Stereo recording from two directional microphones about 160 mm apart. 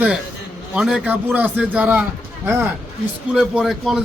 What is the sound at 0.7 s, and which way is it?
Speech, 5° right (ahead or behind).